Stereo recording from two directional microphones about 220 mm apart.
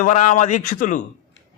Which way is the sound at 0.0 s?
30° left (ahead or behind).